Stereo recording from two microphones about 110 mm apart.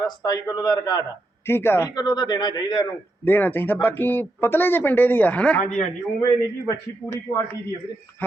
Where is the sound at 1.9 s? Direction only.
40° left (ahead or behind).